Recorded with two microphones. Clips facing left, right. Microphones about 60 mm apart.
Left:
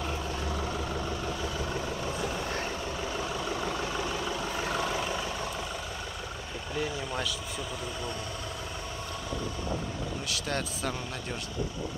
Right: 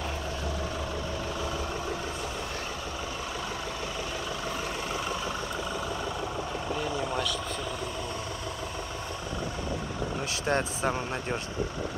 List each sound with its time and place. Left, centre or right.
10.4 s speech: right